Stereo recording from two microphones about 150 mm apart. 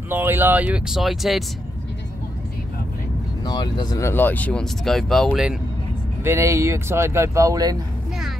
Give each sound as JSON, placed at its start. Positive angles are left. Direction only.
{"t": 0.1, "sound": "speech", "side_deg": -15}
{"t": 3.4, "sound": "speech", "side_deg": 30}
{"t": 4.1, "sound": "speech", "side_deg": 10}
{"t": 6.2, "sound": "speech", "side_deg": -20}